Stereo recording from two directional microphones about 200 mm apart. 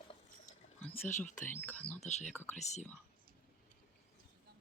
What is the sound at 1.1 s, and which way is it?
Speech, 40° left (ahead or behind).